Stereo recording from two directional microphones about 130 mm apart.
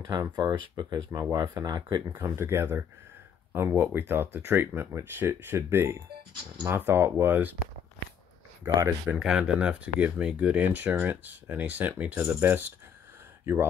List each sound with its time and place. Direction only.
0.2 s speech: 35° right (ahead or behind)
2.1 s speech: 20° right (ahead or behind)
8.6 s speech: 25° right (ahead or behind)
9.2 s speech: 5° right (ahead or behind)